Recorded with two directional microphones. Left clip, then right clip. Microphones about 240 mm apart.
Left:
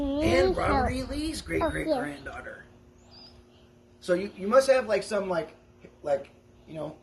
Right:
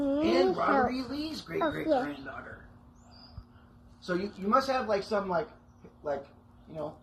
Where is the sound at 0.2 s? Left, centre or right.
Left.